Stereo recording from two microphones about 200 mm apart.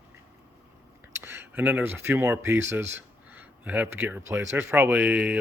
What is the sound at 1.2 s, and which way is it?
Speech, 10° right (ahead or behind).